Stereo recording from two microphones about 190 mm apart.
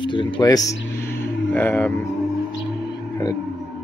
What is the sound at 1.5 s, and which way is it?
Speech, 10° left (ahead or behind).